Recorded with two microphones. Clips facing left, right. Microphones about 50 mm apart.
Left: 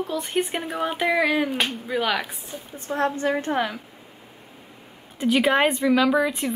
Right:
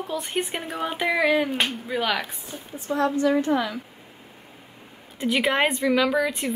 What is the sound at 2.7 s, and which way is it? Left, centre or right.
Speech, left.